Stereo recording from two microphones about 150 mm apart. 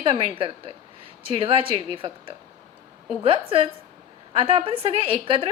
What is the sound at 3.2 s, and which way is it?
A woman's voice, 35° right (ahead or behind).